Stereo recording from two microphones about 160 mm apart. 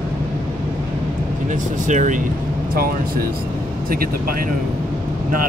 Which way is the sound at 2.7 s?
65° right (ahead or behind).